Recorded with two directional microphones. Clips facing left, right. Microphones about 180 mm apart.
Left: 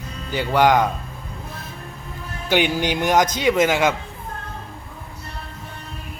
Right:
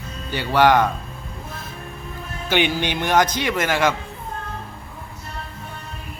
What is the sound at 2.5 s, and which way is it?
Speech, 10° left (ahead or behind).